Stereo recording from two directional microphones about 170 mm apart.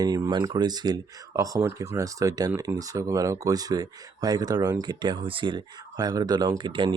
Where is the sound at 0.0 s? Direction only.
25° right (ahead or behind).